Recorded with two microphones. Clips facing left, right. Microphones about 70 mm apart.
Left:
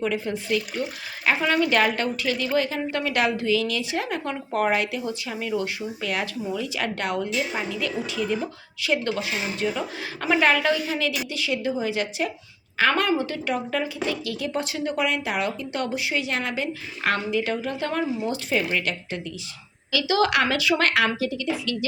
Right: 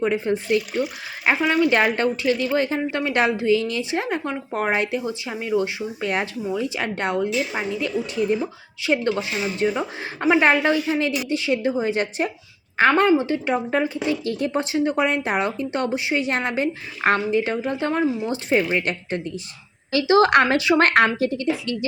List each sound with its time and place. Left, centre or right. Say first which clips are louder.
0.0 s a woman's voice: right 5 dB; right; by 1.7 s centre
1.7 s speech: right 3 dB; right